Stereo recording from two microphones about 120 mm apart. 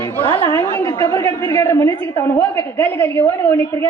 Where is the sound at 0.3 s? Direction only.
35° left (ahead or behind).